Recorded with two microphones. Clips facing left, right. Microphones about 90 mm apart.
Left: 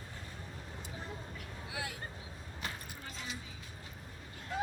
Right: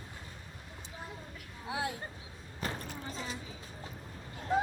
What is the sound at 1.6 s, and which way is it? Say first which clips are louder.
Vehicle: right 7 dB; 30° right (ahead or behind).